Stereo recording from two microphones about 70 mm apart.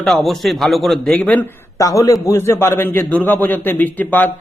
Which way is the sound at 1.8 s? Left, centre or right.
Left.